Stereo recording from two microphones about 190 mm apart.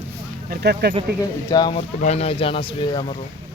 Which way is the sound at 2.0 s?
35° left (ahead or behind).